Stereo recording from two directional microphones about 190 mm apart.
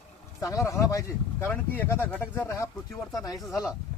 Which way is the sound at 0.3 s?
15° left (ahead or behind).